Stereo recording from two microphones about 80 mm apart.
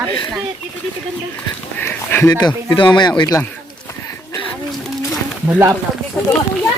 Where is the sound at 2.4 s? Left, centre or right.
Left.